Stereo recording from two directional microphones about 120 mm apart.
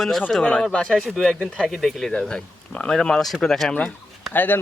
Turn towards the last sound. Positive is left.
turn(degrees=15)  # may be behind; listen again after turning